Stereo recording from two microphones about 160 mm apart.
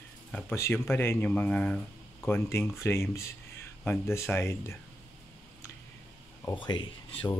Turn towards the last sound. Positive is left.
turn(degrees=30)  # may be behind; listen again after turning